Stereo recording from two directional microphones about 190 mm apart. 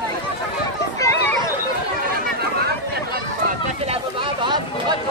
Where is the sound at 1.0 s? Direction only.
10° left (ahead or behind).